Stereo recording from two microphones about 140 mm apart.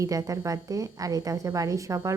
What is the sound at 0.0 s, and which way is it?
A woman's voice, 25° right (ahead or behind).